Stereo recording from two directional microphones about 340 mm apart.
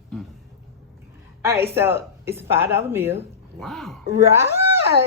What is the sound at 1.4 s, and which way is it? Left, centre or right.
Speech, centre.